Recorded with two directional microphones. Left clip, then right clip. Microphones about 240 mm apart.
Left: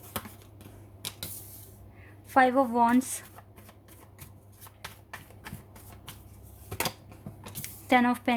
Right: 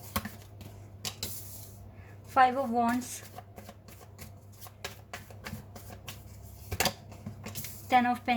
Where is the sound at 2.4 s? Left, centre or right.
Left.